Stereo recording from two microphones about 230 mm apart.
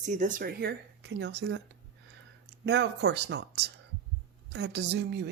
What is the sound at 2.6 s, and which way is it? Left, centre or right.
Speech, right.